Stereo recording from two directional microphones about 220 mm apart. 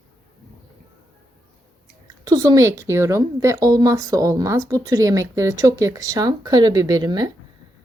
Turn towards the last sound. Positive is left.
turn(degrees=-20)  # may be behind; listen again after turning